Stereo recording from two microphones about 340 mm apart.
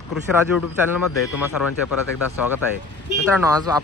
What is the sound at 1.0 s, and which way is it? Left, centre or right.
Speech, left.